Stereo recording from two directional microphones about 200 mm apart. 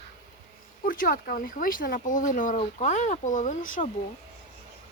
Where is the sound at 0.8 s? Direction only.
45° left (ahead or behind).